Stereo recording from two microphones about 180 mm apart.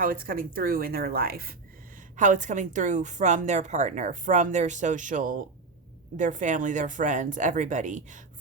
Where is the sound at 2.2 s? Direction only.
45° right (ahead or behind).